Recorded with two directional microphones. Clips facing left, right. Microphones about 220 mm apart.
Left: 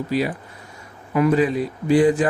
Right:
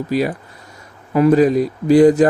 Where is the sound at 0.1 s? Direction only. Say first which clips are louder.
Right 5 dB; 45° right (ahead or behind).